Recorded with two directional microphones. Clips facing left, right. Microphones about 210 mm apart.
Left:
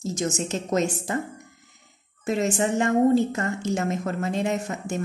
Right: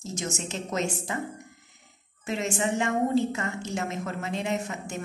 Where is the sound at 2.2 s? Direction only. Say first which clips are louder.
Left 5 dB; 40° left (ahead or behind).